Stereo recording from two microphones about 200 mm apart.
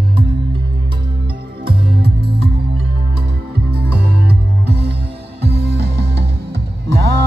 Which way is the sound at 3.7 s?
55° right (ahead or behind).